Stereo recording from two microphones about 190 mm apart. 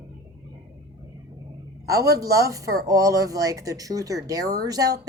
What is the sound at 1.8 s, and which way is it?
Speech, 15° right (ahead or behind).